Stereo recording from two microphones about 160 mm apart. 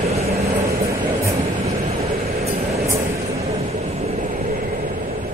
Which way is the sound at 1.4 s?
40° right (ahead or behind).